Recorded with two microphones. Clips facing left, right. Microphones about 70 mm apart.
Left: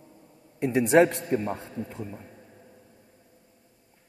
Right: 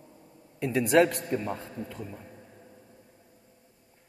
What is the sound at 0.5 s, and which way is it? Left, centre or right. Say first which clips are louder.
Speech: left 3 dB; left.